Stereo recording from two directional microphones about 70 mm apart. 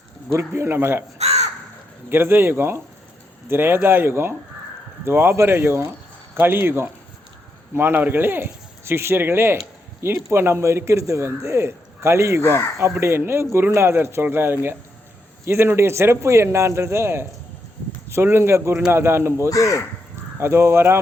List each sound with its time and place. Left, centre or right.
0.3 s a man's voice: right
2.0 s a man's voice: right
12.4 s speech: left
13.0 s a man's voice: right
19.5 s speech: left
20.4 s a man's voice: right